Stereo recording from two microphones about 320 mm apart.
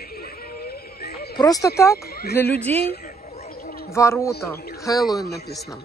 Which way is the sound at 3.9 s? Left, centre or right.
Centre.